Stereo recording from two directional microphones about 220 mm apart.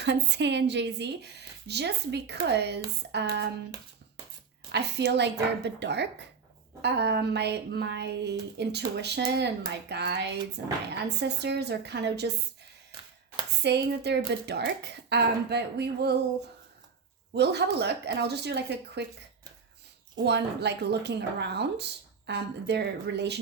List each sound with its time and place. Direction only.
0.0 s a woman's voice: 50° right (ahead or behind)
4.7 s a woman's voice: 50° right (ahead or behind)
13.6 s a woman's voice: 50° right (ahead or behind)
17.3 s a woman's voice: 50° right (ahead or behind)
20.1 s a woman's voice: 50° right (ahead or behind)